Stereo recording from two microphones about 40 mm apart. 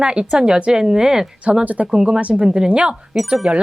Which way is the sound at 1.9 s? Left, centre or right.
Centre.